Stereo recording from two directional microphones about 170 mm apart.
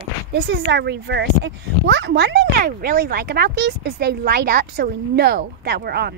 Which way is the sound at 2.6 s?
70° right (ahead or behind).